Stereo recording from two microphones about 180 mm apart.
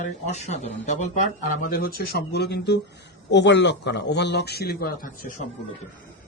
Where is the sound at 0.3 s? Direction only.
40° left (ahead or behind).